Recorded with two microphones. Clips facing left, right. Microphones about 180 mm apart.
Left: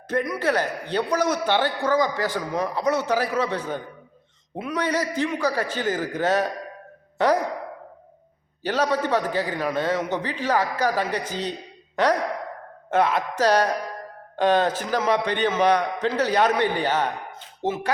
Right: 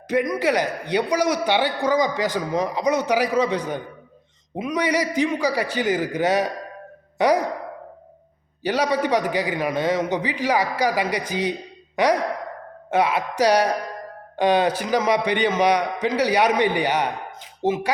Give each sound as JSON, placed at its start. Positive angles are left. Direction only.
{"t": 0.1, "sound": "a man's voice", "side_deg": -15}
{"t": 8.6, "sound": "a man's voice", "side_deg": -10}